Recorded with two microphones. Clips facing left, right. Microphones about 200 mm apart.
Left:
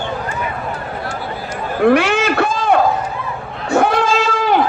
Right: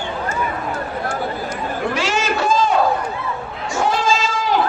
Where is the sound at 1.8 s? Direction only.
60° left (ahead or behind).